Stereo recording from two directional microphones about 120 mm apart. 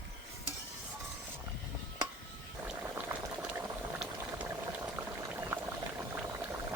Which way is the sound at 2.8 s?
20° right (ahead or behind).